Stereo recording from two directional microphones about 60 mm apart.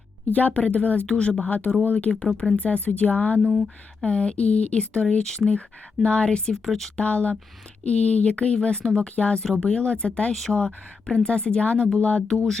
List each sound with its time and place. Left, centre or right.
0.3 s speech: left
1.0 s speech: centre
2.1 s speech: centre
2.6 s speech: left; by 5.4 s centre
5.5 s speech: centre
6.9 s speech: left